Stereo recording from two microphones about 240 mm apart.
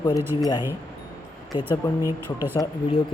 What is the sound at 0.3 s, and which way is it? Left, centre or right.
Speech, centre.